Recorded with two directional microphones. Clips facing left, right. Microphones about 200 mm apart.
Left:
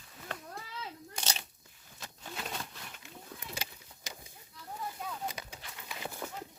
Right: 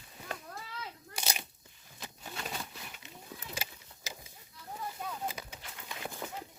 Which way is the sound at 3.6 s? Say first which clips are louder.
Right 1 dB; 5° right (ahead or behind).